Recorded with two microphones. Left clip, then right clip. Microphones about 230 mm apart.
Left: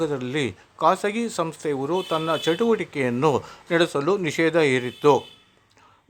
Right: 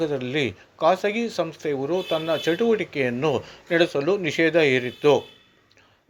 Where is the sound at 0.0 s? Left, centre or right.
Centre.